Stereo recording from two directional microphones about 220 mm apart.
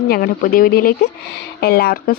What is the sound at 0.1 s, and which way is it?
Speech, 40° left (ahead or behind).